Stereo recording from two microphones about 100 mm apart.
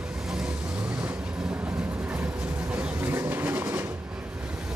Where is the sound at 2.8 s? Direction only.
20° right (ahead or behind).